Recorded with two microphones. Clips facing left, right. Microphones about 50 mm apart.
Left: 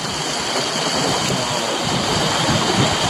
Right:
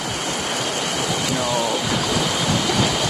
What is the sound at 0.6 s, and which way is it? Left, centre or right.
Waves, left.